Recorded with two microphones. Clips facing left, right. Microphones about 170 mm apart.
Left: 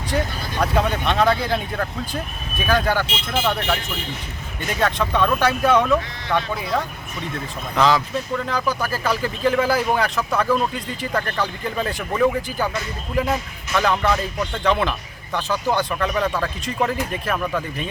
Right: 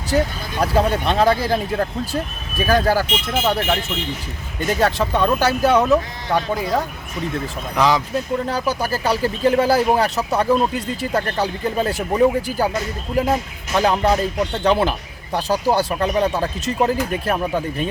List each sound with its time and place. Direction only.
0.6 s speech: 35° right (ahead or behind)
4.8 s speech: 35° right (ahead or behind)
7.8 s speech: 15° right (ahead or behind)
8.4 s speech: 35° right (ahead or behind)